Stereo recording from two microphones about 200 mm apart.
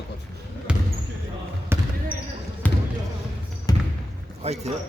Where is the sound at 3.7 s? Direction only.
20° left (ahead or behind).